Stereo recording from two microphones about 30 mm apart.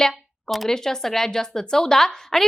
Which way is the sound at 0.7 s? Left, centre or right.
Centre.